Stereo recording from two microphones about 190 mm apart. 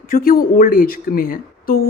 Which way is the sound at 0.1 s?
50° left (ahead or behind).